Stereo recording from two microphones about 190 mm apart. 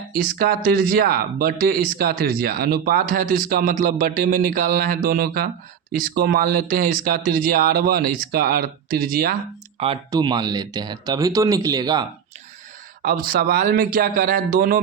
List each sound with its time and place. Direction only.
0.1 s speech: 50° right (ahead or behind)
9.7 s speech: 30° right (ahead or behind)
13.0 s speech: 50° right (ahead or behind)